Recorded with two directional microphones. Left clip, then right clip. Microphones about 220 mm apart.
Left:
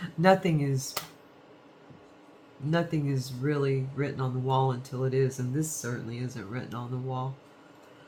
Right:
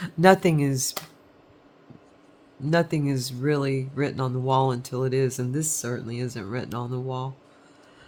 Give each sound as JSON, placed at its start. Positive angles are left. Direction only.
{"t": 0.0, "sound": "speech", "side_deg": -50}
{"t": 2.6, "sound": "speech", "side_deg": -50}